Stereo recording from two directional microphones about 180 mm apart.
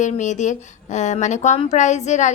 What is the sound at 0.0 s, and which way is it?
A woman's voice, 40° left (ahead or behind).